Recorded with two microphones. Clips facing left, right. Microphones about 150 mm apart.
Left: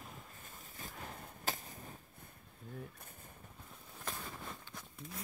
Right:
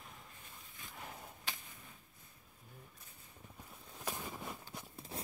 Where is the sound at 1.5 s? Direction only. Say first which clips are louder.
Left 7 dB; 45° left (ahead or behind).